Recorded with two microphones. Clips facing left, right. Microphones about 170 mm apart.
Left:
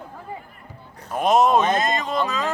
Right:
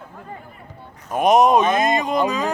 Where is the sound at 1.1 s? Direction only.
15° right (ahead or behind).